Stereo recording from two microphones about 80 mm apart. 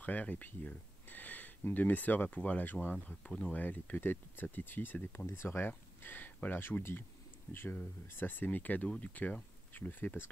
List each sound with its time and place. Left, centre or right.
0.0 s speech: left
3.6 s speech: left